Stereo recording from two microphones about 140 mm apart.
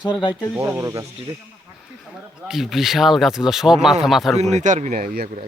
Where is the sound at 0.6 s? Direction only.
20° right (ahead or behind).